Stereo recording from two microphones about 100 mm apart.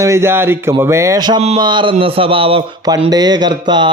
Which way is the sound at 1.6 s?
50° right (ahead or behind).